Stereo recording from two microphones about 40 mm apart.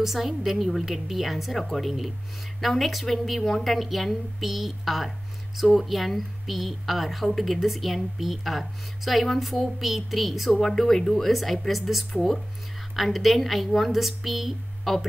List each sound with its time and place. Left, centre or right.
0.0 s a woman's voice: centre